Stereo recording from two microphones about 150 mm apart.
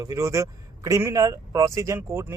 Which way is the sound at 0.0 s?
20° right (ahead or behind).